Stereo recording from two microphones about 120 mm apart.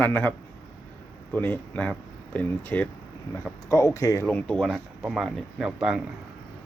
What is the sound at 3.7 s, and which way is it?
Speech, 25° left (ahead or behind).